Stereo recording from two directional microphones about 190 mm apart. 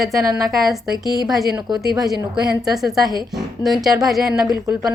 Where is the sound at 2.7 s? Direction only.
Centre (ahead or behind).